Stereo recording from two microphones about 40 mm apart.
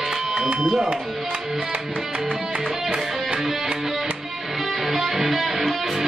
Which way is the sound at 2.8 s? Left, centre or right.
Centre.